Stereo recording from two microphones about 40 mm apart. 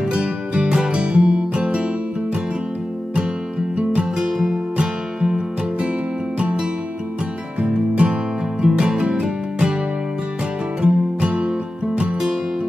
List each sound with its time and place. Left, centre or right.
0.0 s music: right
4.2 s music: centre
7.6 s music: right
10.8 s music: right